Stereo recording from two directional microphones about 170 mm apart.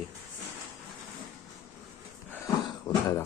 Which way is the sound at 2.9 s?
20° left (ahead or behind).